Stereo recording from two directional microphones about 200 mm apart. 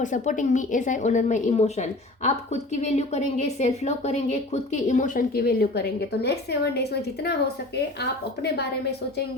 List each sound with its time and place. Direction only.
0.0 s a woman's voice: 40° left (ahead or behind); by 6.8 s 55° left (ahead or behind)